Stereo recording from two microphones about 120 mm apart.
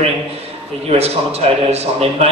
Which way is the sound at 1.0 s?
60° right (ahead or behind).